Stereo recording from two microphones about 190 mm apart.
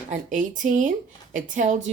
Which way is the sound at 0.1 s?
40° right (ahead or behind).